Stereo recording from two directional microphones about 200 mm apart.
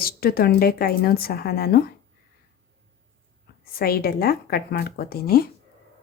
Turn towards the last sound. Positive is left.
turn(degrees=50)  # may be behind; listen again after turning